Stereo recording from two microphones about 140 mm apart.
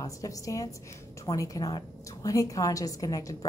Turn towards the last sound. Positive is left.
turn(degrees=25)  # may be behind; listen again after turning